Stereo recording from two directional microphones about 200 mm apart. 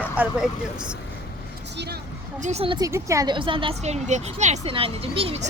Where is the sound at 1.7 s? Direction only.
55° right (ahead or behind).